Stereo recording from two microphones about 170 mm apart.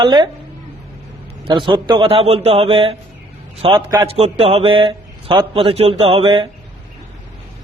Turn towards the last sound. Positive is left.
turn(degrees=-35)  # may be behind; listen again after turning